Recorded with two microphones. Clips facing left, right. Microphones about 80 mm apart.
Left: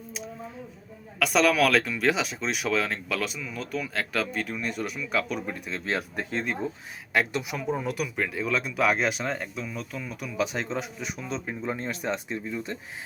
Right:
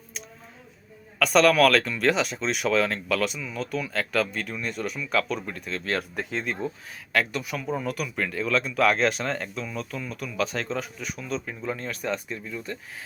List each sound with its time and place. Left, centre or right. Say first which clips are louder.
1.2 s a man's voice: right 3 dB; centre; by 12.7 s left